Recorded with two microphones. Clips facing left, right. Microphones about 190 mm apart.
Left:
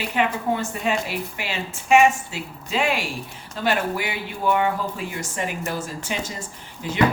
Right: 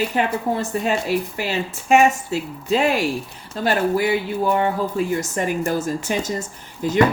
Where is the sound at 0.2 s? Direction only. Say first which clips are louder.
Left 3 dB; 40° right (ahead or behind).